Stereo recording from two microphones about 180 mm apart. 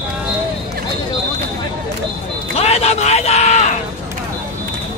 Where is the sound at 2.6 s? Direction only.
35° left (ahead or behind).